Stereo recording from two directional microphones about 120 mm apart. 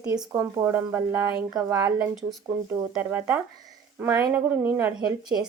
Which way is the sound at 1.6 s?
25° right (ahead or behind).